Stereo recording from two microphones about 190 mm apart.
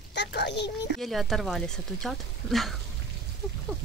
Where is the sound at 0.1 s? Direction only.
65° left (ahead or behind).